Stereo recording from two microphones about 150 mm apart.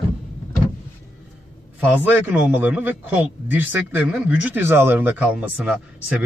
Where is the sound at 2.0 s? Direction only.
10° right (ahead or behind).